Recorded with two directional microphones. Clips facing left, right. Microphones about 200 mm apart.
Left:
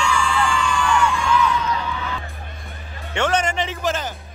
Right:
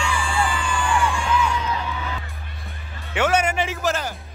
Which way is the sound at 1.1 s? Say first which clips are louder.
Left 2 dB; 30° right (ahead or behind).